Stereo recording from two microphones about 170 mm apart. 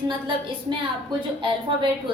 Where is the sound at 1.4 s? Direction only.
30° right (ahead or behind).